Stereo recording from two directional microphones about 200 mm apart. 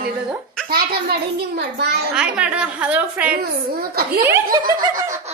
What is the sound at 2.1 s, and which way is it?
A woman's voice, 5° right (ahead or behind).